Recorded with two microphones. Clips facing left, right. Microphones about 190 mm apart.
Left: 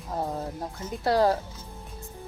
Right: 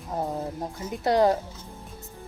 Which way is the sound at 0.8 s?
20° right (ahead or behind).